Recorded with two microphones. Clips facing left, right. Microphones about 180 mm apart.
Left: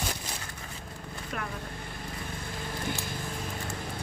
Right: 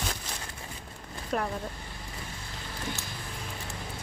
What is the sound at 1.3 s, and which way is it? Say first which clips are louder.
Speech: right 7 dB; 35° right (ahead or behind).